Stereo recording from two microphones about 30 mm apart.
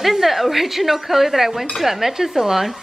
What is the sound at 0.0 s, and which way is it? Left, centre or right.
Speech, centre.